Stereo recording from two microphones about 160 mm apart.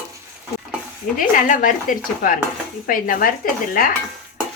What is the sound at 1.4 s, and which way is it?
Dishes, 55° left (ahead or behind).